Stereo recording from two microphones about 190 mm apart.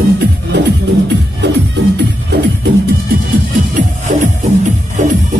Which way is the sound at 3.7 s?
40° right (ahead or behind).